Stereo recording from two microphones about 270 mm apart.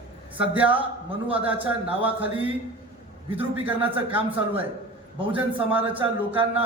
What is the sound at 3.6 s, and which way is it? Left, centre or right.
Speech, centre.